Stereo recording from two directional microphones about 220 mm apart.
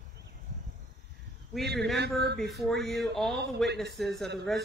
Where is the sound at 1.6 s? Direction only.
50° right (ahead or behind).